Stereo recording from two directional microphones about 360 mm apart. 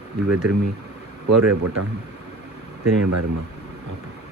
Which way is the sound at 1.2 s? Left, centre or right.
Right.